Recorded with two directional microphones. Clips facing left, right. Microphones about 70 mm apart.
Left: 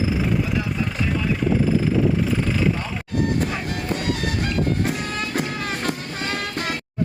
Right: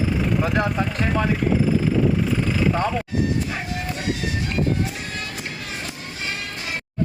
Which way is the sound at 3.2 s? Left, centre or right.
Left.